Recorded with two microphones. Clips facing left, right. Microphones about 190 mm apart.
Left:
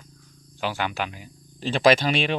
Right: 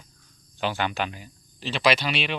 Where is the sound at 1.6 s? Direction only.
50° left (ahead or behind).